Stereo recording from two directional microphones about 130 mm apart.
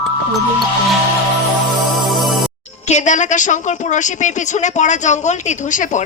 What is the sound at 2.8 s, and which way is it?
A woman's voice, 60° left (ahead or behind).